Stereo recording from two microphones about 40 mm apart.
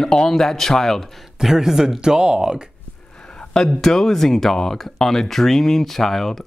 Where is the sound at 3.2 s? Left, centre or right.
Centre.